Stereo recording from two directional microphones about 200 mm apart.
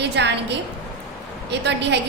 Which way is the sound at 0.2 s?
60° right (ahead or behind).